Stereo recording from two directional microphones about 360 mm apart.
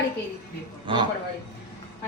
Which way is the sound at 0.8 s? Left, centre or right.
Centre.